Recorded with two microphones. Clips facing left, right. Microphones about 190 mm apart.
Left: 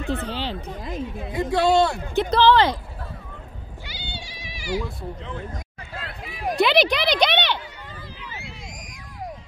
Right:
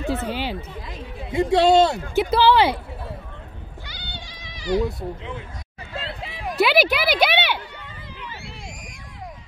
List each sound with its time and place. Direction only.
0.1 s speech: 10° right (ahead or behind)
1.3 s speech: 25° right (ahead or behind)
2.1 s speech: 10° right (ahead or behind)
4.0 s goat: 10° left (ahead or behind)
4.6 s speech: 20° right (ahead or behind)
5.9 s a sound: 25° right (ahead or behind)
6.5 s a sound: 5° right (ahead or behind)